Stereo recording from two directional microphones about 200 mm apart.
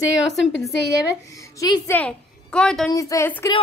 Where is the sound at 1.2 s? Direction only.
15° left (ahead or behind).